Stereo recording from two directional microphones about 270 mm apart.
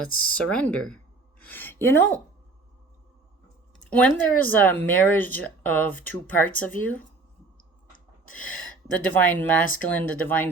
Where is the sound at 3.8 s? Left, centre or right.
Centre.